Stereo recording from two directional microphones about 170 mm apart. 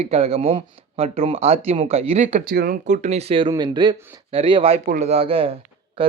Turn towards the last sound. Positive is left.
turn(degrees=-30)  # may be behind; listen again after turning